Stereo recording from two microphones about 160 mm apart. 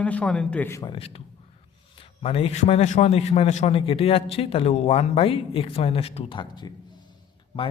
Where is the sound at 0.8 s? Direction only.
35° left (ahead or behind).